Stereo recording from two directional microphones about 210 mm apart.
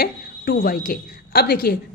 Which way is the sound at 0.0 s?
45° left (ahead or behind).